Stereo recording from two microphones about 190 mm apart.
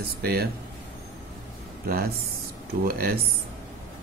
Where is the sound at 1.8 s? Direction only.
50° right (ahead or behind).